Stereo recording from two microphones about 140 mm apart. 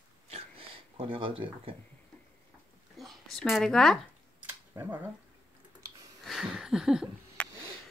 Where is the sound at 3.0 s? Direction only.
Centre (ahead or behind).